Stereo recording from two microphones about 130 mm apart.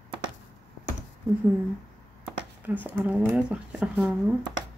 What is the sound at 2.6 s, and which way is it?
Speech, 15° right (ahead or behind).